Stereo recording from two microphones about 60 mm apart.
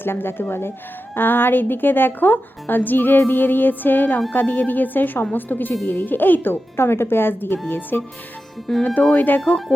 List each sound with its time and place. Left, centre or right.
0.0 s a woman's voice: left
8.7 s speech: centre
9.1 s a woman's voice: left